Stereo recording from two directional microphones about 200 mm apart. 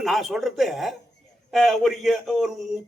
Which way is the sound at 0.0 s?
Centre (ahead or behind).